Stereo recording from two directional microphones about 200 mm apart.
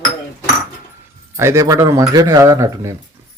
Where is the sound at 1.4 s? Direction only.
15° right (ahead or behind).